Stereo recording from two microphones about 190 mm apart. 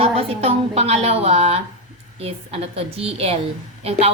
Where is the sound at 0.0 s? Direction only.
30° right (ahead or behind).